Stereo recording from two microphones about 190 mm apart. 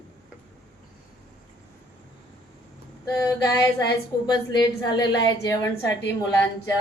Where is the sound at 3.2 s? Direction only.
15° left (ahead or behind).